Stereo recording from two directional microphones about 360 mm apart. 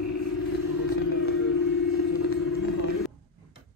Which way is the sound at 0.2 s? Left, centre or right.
Left.